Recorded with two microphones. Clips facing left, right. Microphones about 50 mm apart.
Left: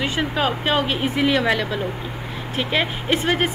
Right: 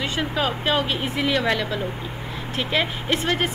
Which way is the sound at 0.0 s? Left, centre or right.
Centre.